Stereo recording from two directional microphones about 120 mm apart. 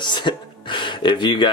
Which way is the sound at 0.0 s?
40° left (ahead or behind).